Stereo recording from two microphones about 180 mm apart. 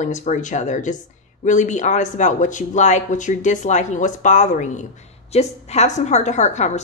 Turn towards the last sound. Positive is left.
turn(degrees=40)  # may be behind; listen again after turning